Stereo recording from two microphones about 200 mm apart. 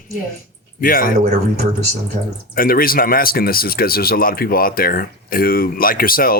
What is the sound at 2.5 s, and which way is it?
Speech, 45° left (ahead or behind).